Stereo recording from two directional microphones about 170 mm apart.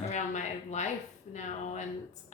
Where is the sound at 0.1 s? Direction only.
45° left (ahead or behind).